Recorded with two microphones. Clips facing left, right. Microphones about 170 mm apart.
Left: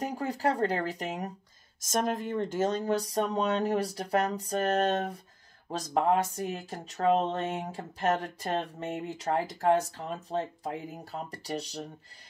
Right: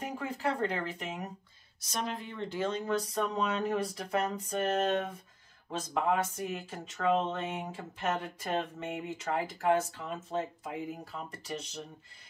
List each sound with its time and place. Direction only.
0.0 s speech: 40° left (ahead or behind)